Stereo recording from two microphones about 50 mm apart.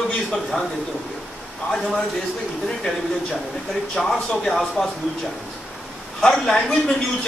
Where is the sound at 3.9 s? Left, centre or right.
Centre.